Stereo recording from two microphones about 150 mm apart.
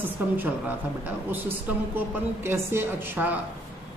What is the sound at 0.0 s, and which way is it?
A woman's voice, 10° right (ahead or behind).